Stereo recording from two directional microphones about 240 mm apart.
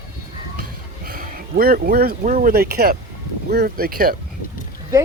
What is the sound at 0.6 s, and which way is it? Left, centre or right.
Speech, right.